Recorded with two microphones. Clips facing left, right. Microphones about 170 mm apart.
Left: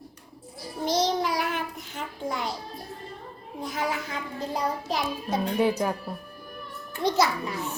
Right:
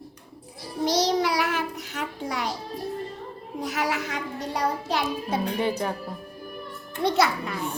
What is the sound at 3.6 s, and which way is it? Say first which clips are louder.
A child's voice: right 2 dB; 85° right.